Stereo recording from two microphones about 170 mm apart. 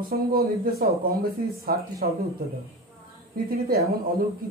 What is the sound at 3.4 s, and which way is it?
Speech, 65° right (ahead or behind).